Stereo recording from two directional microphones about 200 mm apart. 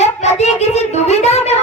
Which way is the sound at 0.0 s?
35° left (ahead or behind).